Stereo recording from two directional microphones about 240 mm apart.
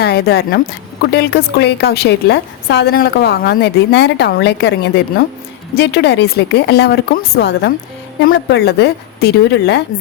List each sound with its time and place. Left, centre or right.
0.0 s a woman's voice: left